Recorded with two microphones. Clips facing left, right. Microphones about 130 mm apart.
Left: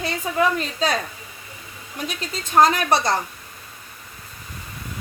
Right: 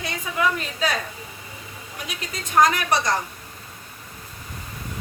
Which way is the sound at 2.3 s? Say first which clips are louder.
Left 2 dB; 30° left (ahead or behind).